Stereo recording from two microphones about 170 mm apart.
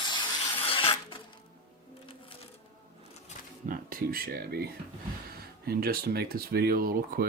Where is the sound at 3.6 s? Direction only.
55° right (ahead or behind).